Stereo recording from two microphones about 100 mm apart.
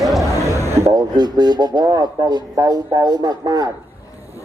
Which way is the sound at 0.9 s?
45° right (ahead or behind).